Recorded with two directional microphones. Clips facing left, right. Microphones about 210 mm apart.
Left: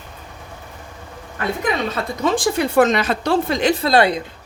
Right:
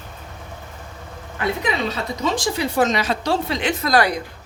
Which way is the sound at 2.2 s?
55° left (ahead or behind).